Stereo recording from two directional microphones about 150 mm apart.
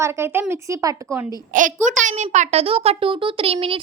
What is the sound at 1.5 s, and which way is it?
A child's voice, 60° right (ahead or behind).